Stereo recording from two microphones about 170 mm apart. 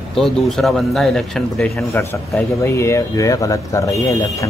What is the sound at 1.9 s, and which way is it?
Speech, 15° left (ahead or behind).